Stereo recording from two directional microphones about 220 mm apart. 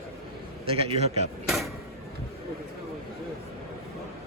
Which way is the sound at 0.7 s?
25° right (ahead or behind).